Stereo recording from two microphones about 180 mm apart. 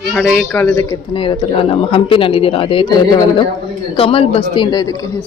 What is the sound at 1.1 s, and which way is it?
A man's voice, 30° left (ahead or behind).